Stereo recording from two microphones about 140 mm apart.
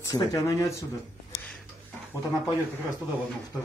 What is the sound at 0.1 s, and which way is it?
Speech, 30° left (ahead or behind).